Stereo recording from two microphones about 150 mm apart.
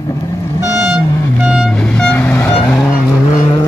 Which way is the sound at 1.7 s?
5° left (ahead or behind).